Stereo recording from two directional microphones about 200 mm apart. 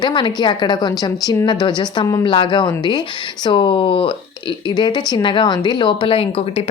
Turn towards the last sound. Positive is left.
turn(degrees=30)  # may be behind; listen again after turning